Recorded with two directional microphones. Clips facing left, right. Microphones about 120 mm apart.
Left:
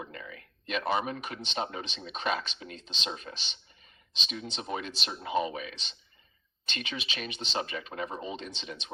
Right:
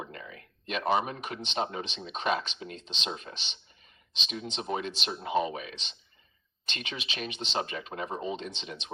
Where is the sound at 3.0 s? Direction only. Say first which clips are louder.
Right 1 dB; 40° right (ahead or behind).